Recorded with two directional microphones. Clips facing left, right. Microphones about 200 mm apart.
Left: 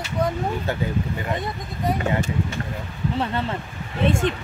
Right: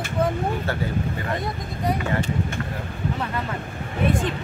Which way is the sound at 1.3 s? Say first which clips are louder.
Even; centre (ahead or behind).